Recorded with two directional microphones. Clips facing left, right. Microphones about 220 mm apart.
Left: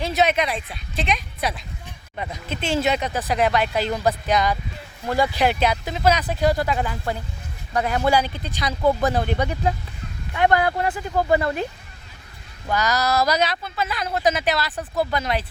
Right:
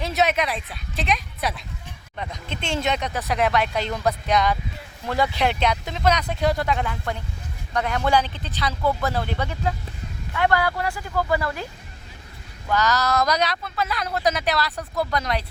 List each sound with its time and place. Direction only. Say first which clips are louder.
0.0 s speech: left 2 dB; centre (ahead or behind); by 11.7 s 20° left (ahead or behind)
12.6 s speech: even; 10° left (ahead or behind)